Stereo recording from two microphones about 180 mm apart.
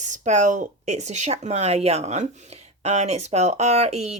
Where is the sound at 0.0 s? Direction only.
40° right (ahead or behind).